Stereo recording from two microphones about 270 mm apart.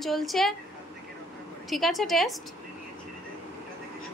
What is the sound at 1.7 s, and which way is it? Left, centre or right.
Speech, centre.